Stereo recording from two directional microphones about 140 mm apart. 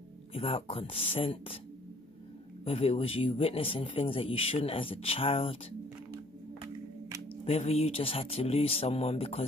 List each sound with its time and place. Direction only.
0.3 s speech: 40° left (ahead or behind)
2.6 s a man's voice: 45° left (ahead or behind)
7.4 s a man's voice: 45° left (ahead or behind)